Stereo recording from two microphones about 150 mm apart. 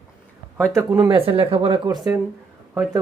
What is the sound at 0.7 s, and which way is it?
Speech, 20° right (ahead or behind).